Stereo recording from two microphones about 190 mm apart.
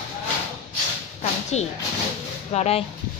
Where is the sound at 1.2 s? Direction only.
35° left (ahead or behind).